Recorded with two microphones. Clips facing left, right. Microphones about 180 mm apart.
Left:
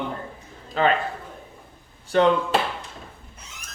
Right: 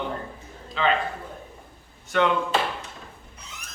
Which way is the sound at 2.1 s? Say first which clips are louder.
Left 4 dB; 35° left (ahead or behind).